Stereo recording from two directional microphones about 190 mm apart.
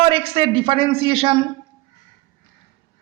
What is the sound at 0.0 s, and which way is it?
A man's voice, 30° right (ahead or behind).